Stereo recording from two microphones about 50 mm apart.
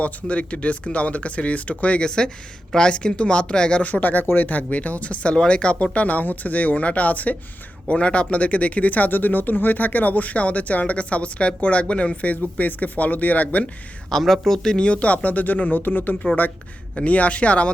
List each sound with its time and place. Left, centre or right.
0.0 s speech: left
14.1 s speech: centre; by 16.1 s left
17.0 s speech: left